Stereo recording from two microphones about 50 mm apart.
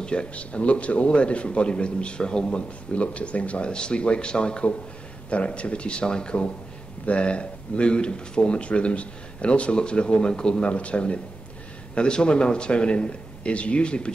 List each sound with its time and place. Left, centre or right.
0.0 s a man's voice: centre